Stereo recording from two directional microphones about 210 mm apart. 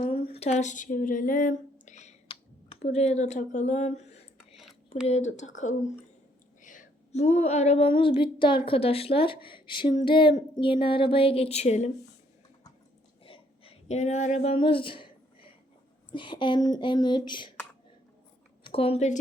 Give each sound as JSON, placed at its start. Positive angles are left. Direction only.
{"t": 0.3, "sound": "speech", "side_deg": 30}
{"t": 4.4, "sound": "a sound", "side_deg": 0}
{"t": 5.0, "sound": "speech", "side_deg": 30}
{"t": 6.6, "sound": "female singing", "side_deg": 40}
{"t": 13.2, "sound": "a sound", "side_deg": 25}
{"t": 16.1, "sound": "female singing", "side_deg": 25}
{"t": 18.6, "sound": "a woman's voice", "side_deg": 25}